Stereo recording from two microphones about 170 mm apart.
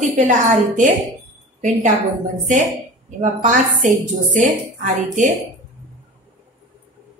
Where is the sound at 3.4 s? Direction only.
50° right (ahead or behind).